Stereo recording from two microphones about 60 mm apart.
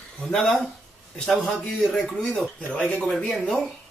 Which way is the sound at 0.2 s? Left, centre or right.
Centre.